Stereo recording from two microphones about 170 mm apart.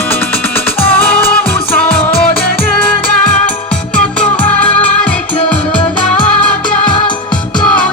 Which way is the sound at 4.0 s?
5° left (ahead or behind).